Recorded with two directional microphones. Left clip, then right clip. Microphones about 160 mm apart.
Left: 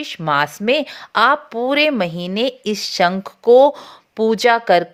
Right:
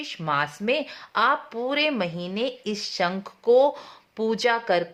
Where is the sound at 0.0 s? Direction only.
40° left (ahead or behind).